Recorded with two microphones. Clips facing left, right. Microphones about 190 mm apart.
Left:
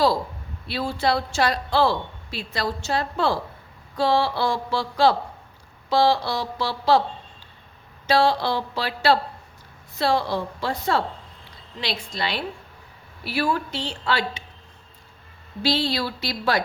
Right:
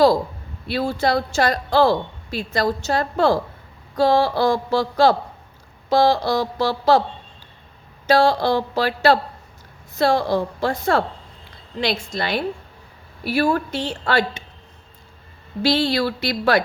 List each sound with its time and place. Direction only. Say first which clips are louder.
0.7 s a woman's voice: right 3 dB; 45° right (ahead or behind)
8.0 s a woman's voice: right 4 dB; 45° right (ahead or behind)
15.6 s speech: right 5 dB; 55° right (ahead or behind)